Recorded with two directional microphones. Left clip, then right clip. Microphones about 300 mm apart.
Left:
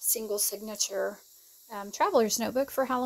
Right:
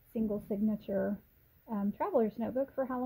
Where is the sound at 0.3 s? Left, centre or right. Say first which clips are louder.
Left 3 dB; centre.